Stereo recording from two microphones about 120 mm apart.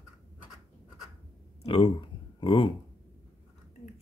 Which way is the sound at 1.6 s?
45° left (ahead or behind).